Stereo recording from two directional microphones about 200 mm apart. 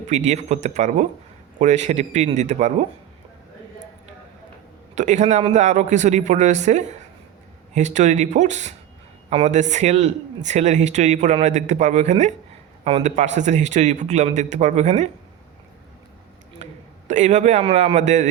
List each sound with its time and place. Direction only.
0.3 s speech: 35° right (ahead or behind)
4.9 s speech: 35° right (ahead or behind)
16.6 s a sound: 35° right (ahead or behind)
17.1 s speech: 35° right (ahead or behind)